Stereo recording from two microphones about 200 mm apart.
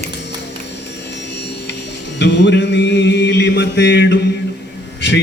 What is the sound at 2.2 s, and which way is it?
Mantra, 60° left (ahead or behind).